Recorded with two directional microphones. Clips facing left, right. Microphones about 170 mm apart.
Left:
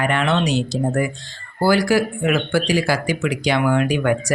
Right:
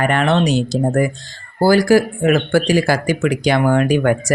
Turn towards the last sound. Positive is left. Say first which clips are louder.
# right 4 dB
turn(degrees=-45)  # may be behind; listen again after turning